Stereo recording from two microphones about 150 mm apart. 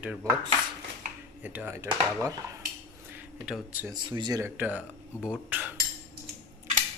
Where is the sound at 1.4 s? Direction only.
10° right (ahead or behind).